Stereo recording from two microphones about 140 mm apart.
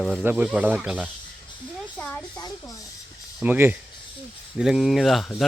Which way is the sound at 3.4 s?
15° right (ahead or behind).